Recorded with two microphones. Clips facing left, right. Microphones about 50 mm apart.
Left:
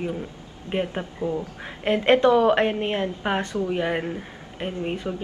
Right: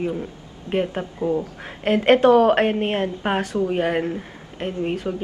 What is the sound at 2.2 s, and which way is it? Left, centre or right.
A woman's voice, right.